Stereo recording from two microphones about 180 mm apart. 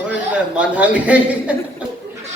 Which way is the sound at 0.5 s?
5° right (ahead or behind).